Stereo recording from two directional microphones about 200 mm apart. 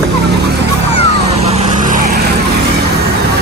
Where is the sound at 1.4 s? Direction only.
35° right (ahead or behind).